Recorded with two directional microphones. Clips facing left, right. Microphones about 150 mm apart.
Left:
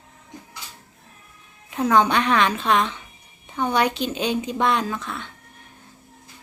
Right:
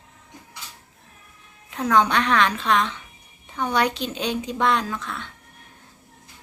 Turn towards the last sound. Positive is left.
turn(degrees=5)  # may be behind; listen again after turning